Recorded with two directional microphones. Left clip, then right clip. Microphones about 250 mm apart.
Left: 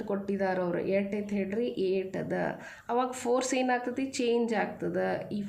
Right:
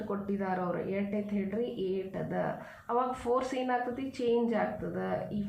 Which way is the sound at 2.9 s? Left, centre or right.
Left.